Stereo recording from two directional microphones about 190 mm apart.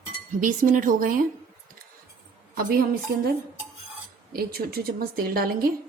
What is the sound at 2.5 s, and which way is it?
Speech, 50° right (ahead or behind).